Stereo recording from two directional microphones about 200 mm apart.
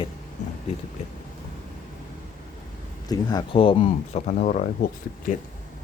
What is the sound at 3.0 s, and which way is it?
Speech, 20° left (ahead or behind).